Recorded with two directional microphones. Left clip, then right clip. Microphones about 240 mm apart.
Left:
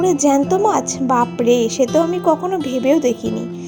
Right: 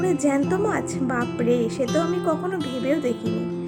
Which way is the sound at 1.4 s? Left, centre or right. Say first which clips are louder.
Left 6 dB; centre.